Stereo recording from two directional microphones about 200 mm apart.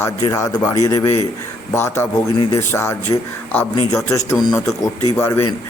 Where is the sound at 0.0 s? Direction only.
15° left (ahead or behind).